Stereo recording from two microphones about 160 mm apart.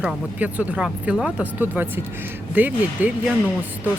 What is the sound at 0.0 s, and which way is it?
Speech, 10° right (ahead or behind).